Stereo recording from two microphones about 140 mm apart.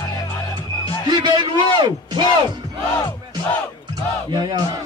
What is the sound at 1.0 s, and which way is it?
A man's voice, 30° right (ahead or behind).